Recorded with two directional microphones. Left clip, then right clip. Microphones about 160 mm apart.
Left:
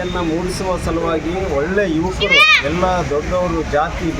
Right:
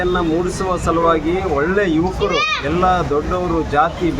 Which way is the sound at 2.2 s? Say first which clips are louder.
Left 11 dB; 50° right (ahead or behind).